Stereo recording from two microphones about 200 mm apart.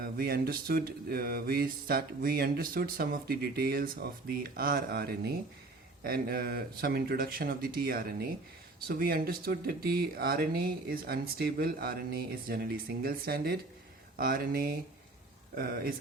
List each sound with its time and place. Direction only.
0.0 s mantra: 50° right (ahead or behind)